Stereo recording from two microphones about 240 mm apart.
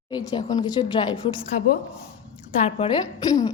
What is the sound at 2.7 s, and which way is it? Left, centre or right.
Speech, left.